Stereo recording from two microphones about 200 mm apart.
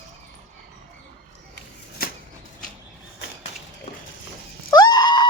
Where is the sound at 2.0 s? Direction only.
50° left (ahead or behind).